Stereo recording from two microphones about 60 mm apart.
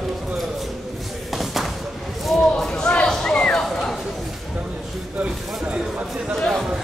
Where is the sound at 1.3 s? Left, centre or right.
Centre.